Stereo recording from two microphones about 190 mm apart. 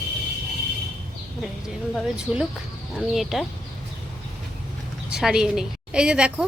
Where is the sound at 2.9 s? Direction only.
Centre (ahead or behind).